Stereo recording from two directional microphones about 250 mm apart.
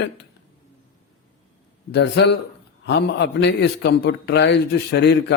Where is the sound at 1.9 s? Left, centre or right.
Left.